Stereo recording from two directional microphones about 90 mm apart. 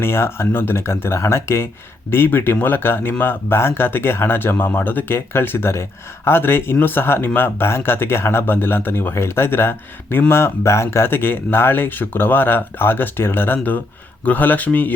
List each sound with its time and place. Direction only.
0.0 s speech: 25° left (ahead or behind)